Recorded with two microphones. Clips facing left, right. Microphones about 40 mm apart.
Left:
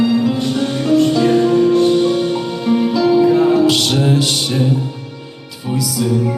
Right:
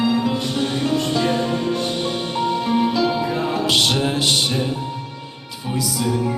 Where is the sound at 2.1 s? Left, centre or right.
Centre.